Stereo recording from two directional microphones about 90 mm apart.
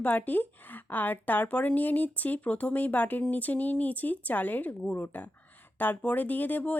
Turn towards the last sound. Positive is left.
turn(degrees=20)  # may be behind; listen again after turning